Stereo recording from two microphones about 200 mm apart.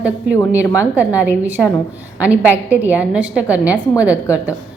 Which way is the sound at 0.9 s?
5° right (ahead or behind).